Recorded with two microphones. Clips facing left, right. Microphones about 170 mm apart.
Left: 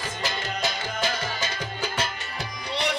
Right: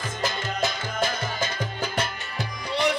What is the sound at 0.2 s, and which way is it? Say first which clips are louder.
Music: right 3 dB; 50° right (ahead or behind).